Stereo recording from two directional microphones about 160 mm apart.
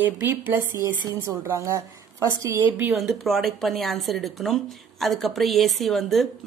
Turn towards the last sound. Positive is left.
turn(degrees=0)  # may be behind; listen again after turning